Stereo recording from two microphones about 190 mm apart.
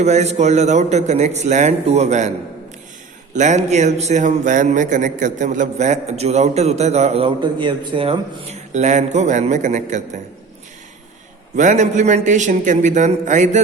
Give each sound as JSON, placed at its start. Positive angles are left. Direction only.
{"t": 0.0, "sound": "a man's voice", "side_deg": -35}
{"t": 3.3, "sound": "a man's voice", "side_deg": -40}
{"t": 11.5, "sound": "a man's voice", "side_deg": -40}